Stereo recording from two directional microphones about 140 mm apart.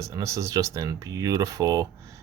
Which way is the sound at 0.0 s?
20° right (ahead or behind).